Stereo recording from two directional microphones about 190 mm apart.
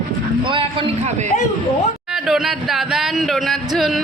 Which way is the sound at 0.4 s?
25° right (ahead or behind).